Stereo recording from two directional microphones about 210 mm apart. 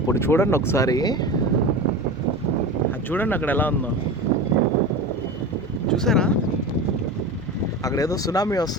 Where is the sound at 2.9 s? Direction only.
10° left (ahead or behind).